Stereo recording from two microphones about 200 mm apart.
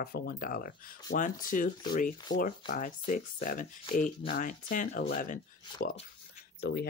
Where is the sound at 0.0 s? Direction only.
45° left (ahead or behind).